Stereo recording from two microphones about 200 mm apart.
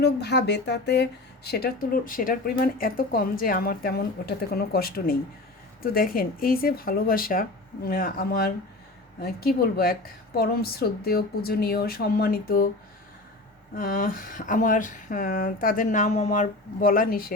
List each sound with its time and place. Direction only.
0.0 s speech: 55° left (ahead or behind)
13.7 s speech: 45° left (ahead or behind)